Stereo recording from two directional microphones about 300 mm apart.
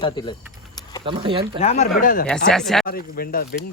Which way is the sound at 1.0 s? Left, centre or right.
Centre.